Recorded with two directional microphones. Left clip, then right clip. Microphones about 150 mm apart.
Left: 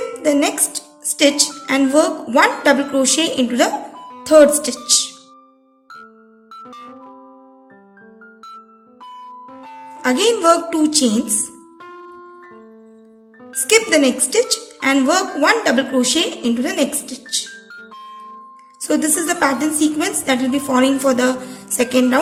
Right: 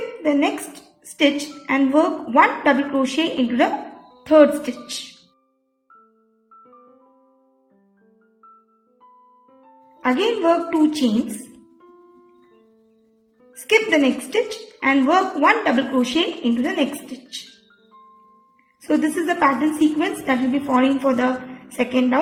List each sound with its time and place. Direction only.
0.2 s a woman's voice: 20° left (ahead or behind)
6.9 s electric piano: 30° left (ahead or behind)
9.5 s a woman's voice: 30° left (ahead or behind)
13.4 s a woman's voice: 20° left (ahead or behind)
18.8 s a woman's voice: 20° left (ahead or behind)